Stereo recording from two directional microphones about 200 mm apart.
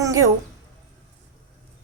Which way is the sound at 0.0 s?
15° right (ahead or behind).